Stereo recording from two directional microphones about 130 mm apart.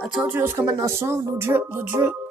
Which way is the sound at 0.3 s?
20° right (ahead or behind).